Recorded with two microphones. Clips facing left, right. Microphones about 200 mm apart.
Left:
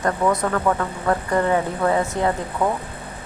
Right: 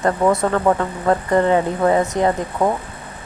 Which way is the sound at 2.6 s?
40° right (ahead or behind).